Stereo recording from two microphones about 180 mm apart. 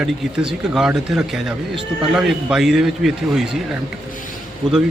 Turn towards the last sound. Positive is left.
turn(degrees=-25)  # may be behind; listen again after turning